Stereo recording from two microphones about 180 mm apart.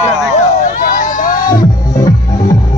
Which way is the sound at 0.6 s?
45° left (ahead or behind).